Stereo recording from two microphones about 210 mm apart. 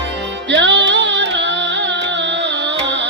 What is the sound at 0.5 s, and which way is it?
Music, 60° right (ahead or behind).